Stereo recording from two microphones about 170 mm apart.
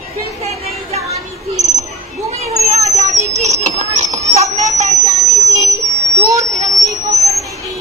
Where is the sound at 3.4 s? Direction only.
45° right (ahead or behind).